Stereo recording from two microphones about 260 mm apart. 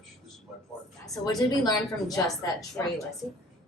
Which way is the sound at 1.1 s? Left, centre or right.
Centre.